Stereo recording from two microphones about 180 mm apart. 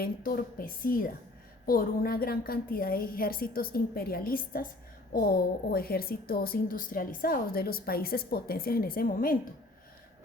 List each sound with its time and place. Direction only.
0.0 s a woman's voice: 55° left (ahead or behind)